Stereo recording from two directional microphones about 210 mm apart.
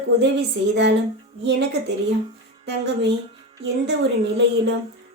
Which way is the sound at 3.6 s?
55° right (ahead or behind).